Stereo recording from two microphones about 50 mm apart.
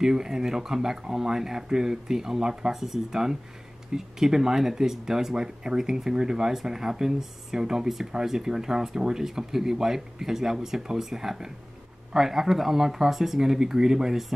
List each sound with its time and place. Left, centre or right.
0.0 s speech: centre